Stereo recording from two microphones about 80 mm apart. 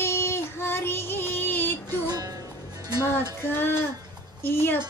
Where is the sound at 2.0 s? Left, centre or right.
Right.